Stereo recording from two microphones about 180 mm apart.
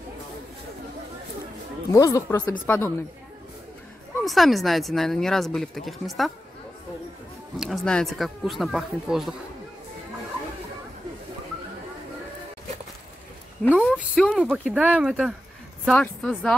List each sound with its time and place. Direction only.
1.9 s speech: 20° left (ahead or behind)
4.2 s speech: centre (ahead or behind)
7.5 s speech: centre (ahead or behind)
13.6 s speech: 5° left (ahead or behind)